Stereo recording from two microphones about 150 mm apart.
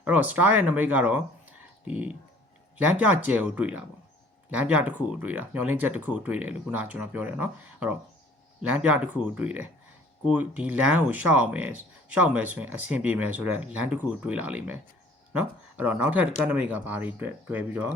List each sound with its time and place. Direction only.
0.0 s speech: 10° right (ahead or behind)